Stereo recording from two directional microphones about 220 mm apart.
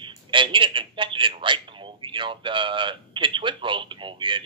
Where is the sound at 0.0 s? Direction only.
20° right (ahead or behind).